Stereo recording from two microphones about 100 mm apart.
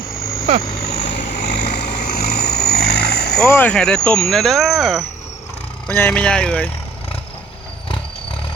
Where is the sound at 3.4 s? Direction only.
25° left (ahead or behind).